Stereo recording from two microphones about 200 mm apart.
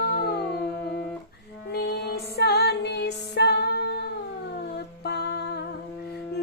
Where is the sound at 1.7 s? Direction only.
55° left (ahead or behind).